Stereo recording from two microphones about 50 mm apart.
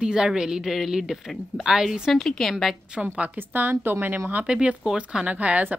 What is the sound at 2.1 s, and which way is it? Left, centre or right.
Speech, centre.